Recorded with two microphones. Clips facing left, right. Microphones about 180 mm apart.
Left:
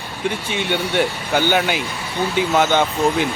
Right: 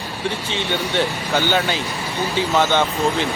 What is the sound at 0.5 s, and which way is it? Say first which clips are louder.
Speech: left 2 dB; 15° left (ahead or behind).